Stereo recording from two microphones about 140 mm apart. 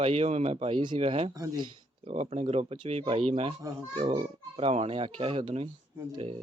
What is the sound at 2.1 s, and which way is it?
Speech, 50° right (ahead or behind).